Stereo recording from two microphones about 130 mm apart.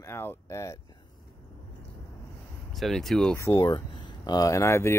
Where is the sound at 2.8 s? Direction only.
Centre (ahead or behind).